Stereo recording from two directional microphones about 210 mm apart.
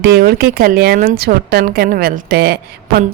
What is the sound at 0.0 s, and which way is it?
Speech, 50° right (ahead or behind).